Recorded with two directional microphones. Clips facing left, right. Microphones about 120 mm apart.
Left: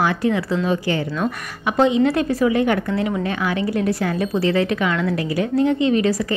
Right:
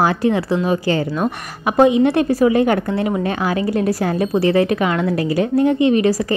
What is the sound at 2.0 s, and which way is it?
Speech, 30° right (ahead or behind).